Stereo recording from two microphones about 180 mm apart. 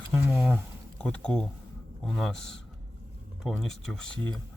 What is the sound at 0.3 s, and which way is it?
Speech, 10° right (ahead or behind).